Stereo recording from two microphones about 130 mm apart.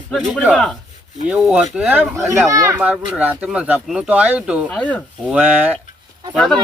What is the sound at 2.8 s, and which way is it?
Speech, 10° right (ahead or behind).